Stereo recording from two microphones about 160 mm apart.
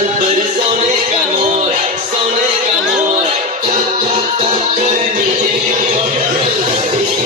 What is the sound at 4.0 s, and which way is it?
Music, 40° right (ahead or behind).